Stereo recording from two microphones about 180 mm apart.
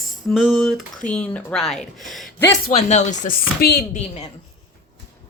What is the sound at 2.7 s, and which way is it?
A woman's voice, 40° left (ahead or behind).